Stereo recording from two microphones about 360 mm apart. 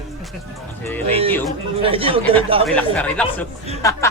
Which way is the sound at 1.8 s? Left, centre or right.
Centre.